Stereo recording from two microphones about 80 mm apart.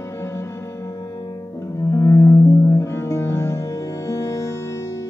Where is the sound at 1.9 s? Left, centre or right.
Left.